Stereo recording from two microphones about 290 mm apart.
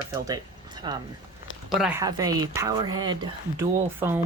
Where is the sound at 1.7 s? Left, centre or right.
Centre.